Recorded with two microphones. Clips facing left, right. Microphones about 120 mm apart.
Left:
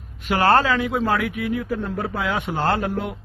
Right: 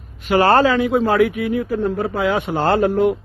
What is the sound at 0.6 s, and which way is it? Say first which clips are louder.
A man's voice: right 6 dB; 25° right (ahead or behind).